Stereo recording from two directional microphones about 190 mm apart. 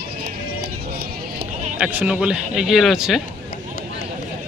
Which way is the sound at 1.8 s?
5° right (ahead or behind).